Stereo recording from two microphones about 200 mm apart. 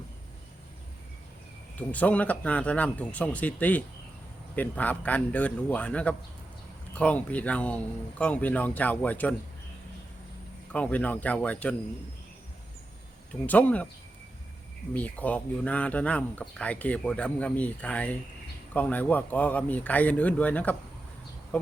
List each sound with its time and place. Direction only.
1.9 s speech: 5° left (ahead or behind)
10.7 s speech: 5° left (ahead or behind)
13.4 s speech: 10° left (ahead or behind)
14.9 s speech: 5° left (ahead or behind)